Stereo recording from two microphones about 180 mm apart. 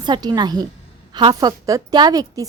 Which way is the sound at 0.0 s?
25° right (ahead or behind).